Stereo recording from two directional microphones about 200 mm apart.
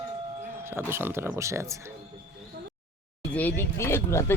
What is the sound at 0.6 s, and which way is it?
Speech, 10° right (ahead or behind).